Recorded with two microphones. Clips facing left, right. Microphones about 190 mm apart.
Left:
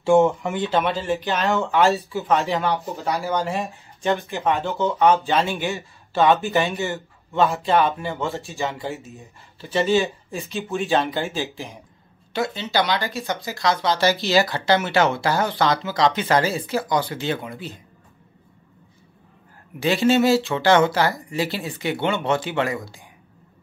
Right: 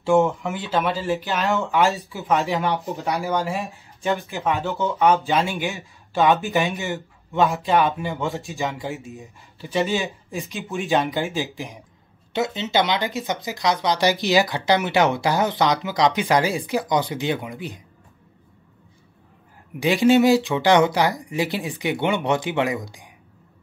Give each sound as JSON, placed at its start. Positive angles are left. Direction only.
{"t": 0.0, "sound": "speech", "side_deg": 0}
{"t": 1.8, "sound": "speech", "side_deg": -15}
{"t": 3.5, "sound": "speech", "side_deg": 0}
{"t": 19.8, "sound": "speech", "side_deg": -15}